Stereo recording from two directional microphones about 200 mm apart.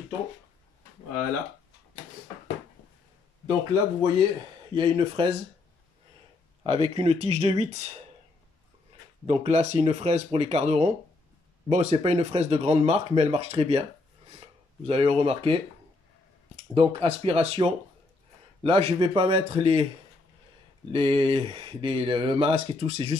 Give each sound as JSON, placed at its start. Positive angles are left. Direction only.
{"t": 3.4, "sound": "speech", "side_deg": -20}
{"t": 6.6, "sound": "speech", "side_deg": -30}
{"t": 9.2, "sound": "speech", "side_deg": -30}
{"t": 20.9, "sound": "speech", "side_deg": -25}